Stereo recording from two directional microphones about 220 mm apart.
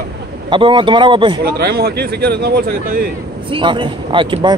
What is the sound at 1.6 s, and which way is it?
Speech, 45° right (ahead or behind).